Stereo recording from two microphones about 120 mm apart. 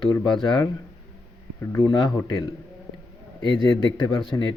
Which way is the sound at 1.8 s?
40° left (ahead or behind).